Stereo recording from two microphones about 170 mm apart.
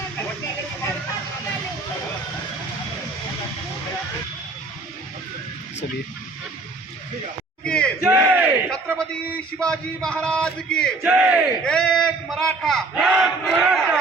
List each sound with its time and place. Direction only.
7.6 s crowd: 5° left (ahead or behind)
8.0 s battle cry: 10° right (ahead or behind)
8.7 s a man's voice: 5° left (ahead or behind)
11.0 s a sound: 5° right (ahead or behind)